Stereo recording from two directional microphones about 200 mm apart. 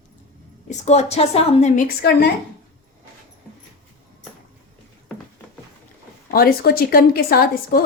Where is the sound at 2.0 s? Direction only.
55° left (ahead or behind).